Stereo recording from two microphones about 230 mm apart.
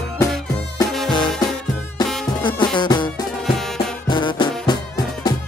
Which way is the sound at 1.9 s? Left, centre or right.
Centre.